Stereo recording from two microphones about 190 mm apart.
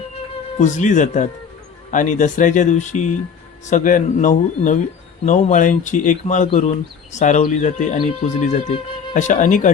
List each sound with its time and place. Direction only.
0.6 s speech: 40° left (ahead or behind)